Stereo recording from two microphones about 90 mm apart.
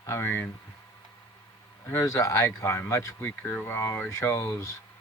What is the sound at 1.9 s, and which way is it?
Speech, 35° left (ahead or behind).